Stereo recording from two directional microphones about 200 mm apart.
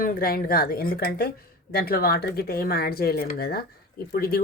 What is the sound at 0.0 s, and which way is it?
Speech, 45° left (ahead or behind).